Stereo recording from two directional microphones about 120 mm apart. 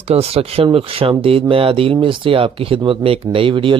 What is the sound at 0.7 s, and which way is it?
Speech, 55° right (ahead or behind).